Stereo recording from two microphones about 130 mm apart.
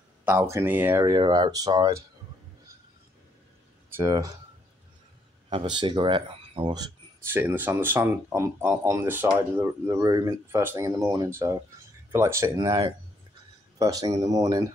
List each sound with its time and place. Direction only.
0.2 s speech: 15° right (ahead or behind)
1.0 s speech: 35° right (ahead or behind)
3.9 s speech: 25° right (ahead or behind)
5.5 s speech: 40° right (ahead or behind)
7.2 s speech: 15° right (ahead or behind)
12.4 s speech: 30° right (ahead or behind)